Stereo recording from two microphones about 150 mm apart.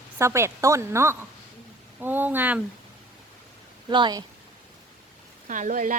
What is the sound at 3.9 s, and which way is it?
Speech, 30° right (ahead or behind).